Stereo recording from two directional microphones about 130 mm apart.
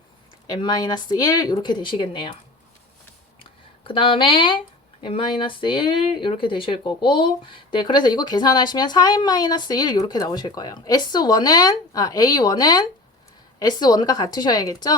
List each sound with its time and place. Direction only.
0.4 s speech: 30° left (ahead or behind)
3.8 s speech: 40° left (ahead or behind)